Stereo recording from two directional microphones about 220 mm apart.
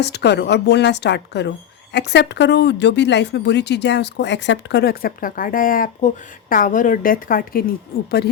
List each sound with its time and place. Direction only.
0.0 s a woman's voice: 50° left (ahead or behind)